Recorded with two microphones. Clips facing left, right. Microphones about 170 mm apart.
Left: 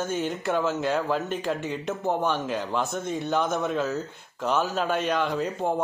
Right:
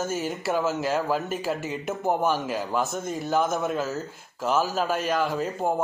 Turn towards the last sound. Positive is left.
turn(degrees=-5)  # may be behind; listen again after turning